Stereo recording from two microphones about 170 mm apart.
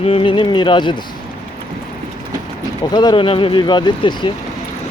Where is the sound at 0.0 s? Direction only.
35° left (ahead or behind).